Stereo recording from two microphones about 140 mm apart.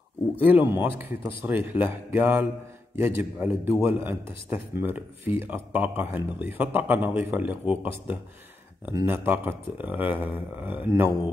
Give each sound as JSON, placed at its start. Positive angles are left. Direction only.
{"t": 0.4, "sound": "a man's voice", "side_deg": -15}